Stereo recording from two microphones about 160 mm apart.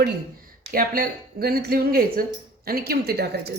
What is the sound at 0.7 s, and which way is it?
A woman's voice, 65° right (ahead or behind).